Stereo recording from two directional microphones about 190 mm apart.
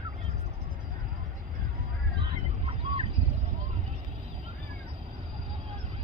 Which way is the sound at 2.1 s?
30° right (ahead or behind).